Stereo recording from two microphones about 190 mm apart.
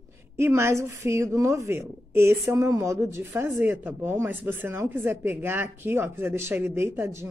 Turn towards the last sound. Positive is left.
turn(degrees=-10)  # may be behind; listen again after turning